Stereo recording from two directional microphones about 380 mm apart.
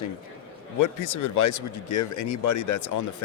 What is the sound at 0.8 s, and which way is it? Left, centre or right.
Speech, left.